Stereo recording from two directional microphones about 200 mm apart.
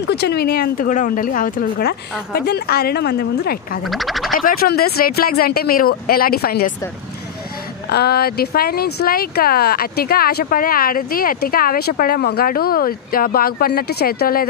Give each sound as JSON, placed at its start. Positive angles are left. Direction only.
{"t": 0.0, "sound": "speech", "side_deg": 55}
{"t": 3.8, "sound": "speech", "side_deg": 0}
{"t": 4.4, "sound": "speech", "side_deg": 45}
{"t": 7.9, "sound": "speech", "side_deg": 50}